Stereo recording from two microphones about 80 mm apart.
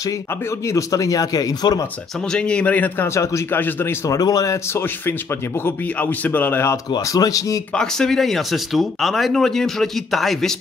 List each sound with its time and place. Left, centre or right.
0.5 s a man's voice: left
2.2 s a man's voice: centre
3.1 s speech: left
3.4 s speech: left
4.1 s a man's voice: left
4.7 s speech: left
7.0 s a man's voice: left
7.7 s speech: centre